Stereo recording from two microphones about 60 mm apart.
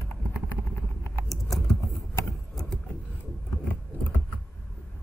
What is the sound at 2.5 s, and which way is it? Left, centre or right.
Vehicle, centre.